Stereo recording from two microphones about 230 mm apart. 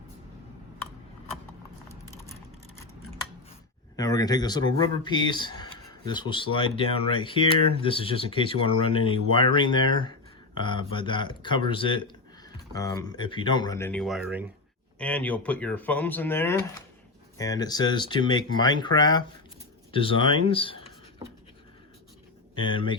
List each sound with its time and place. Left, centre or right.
3.9 s speech: centre
22.7 s speech: left